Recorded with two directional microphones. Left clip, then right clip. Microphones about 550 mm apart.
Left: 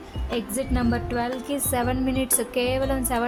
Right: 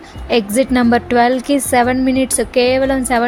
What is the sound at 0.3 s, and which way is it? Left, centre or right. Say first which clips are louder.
A woman's voice: right 14 dB; left.